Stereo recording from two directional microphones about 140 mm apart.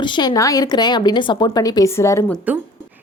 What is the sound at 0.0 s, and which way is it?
A woman's voice, 30° left (ahead or behind).